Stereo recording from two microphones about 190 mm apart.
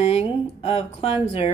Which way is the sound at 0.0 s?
30° left (ahead or behind).